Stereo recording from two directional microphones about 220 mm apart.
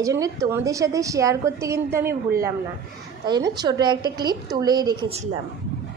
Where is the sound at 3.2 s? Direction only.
20° right (ahead or behind).